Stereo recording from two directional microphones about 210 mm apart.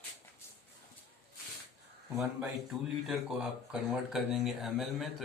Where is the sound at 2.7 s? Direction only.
Centre (ahead or behind).